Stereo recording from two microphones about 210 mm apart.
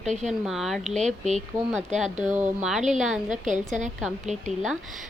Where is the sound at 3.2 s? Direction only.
35° right (ahead or behind).